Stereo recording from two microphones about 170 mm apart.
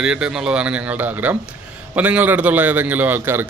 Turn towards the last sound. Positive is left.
turn(degrees=-10)  # may be behind; listen again after turning